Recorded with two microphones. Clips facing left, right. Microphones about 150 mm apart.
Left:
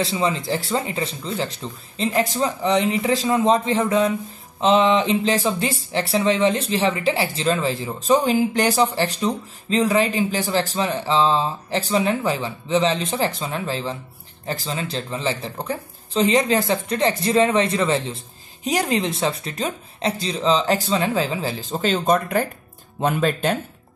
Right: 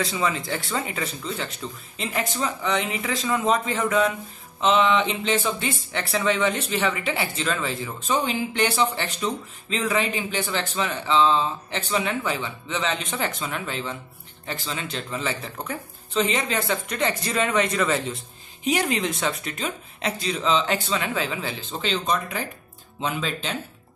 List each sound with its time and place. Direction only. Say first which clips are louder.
0.0 s speech: left 3 dB; 30° left (ahead or behind); by 23.6 s 50° left (ahead or behind)